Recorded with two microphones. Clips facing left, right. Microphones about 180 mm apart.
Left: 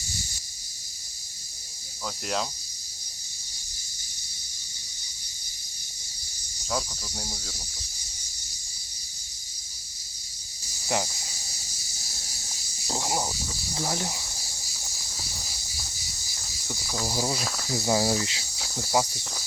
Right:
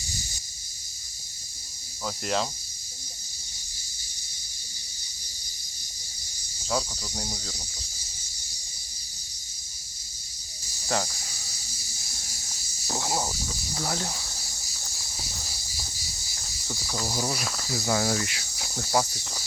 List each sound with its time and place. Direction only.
2.2 s speech: centre (ahead or behind)
6.7 s speech: centre (ahead or behind)
10.8 s speech: 15° left (ahead or behind)
12.9 s a sound: 15° left (ahead or behind)
13.7 s speech: 20° left (ahead or behind)
16.6 s cricket: 5° left (ahead or behind)
17.7 s speech: 20° left (ahead or behind)